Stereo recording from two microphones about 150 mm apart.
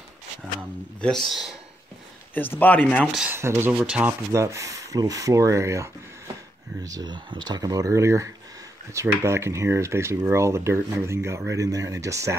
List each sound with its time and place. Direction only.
1.0 s speech: centre (ahead or behind)
2.3 s speech: 15° left (ahead or behind)
3.2 s speech: 15° right (ahead or behind)
4.3 s speech: 20° right (ahead or behind)